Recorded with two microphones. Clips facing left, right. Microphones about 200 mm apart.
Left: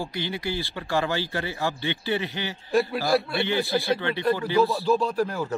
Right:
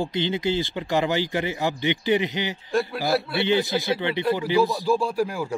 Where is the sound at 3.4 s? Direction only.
20° right (ahead or behind).